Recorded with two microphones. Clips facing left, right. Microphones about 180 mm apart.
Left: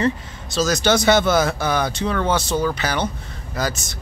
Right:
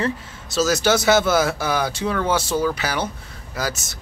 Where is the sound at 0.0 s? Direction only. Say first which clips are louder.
Left 3 dB; 5° right (ahead or behind).